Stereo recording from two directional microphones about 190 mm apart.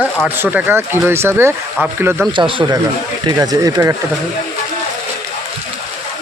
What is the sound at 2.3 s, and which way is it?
Speech, 25° right (ahead or behind).